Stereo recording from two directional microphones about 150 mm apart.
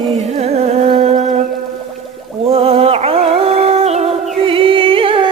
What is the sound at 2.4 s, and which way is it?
Music, 40° right (ahead or behind).